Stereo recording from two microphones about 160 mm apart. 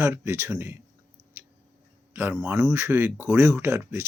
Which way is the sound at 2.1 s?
15° right (ahead or behind).